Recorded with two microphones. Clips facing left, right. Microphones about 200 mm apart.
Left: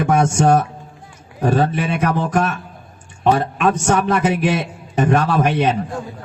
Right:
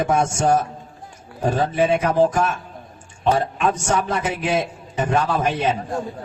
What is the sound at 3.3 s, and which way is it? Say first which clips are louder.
A man's voice: left 3 dB; 65° left (ahead or behind).